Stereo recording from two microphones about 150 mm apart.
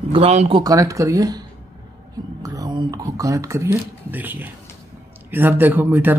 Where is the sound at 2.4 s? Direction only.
25° right (ahead or behind).